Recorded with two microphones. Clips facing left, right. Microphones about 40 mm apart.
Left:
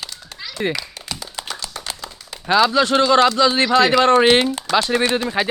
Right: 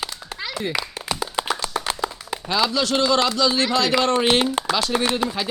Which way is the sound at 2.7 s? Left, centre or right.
Left.